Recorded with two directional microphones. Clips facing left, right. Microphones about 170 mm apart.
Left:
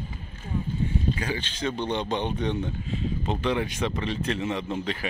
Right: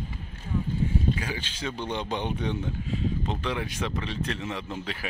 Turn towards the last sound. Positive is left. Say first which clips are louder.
# left 5 dB
turn(degrees=-5)  # may be behind; listen again after turning